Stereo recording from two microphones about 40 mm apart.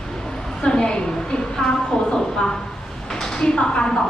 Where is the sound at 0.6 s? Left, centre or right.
Centre.